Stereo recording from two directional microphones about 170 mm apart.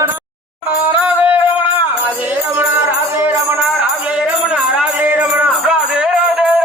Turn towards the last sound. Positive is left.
turn(degrees=-5)  # may be behind; listen again after turning